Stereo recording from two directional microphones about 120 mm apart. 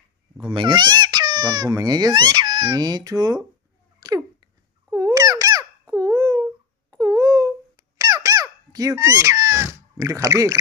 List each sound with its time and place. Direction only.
0.5 s speech: 40° right (ahead or behind)
4.9 s a sound: 30° right (ahead or behind)
6.9 s squeak: 30° right (ahead or behind)